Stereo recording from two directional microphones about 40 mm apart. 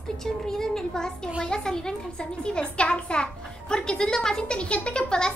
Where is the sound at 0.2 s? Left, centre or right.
Centre.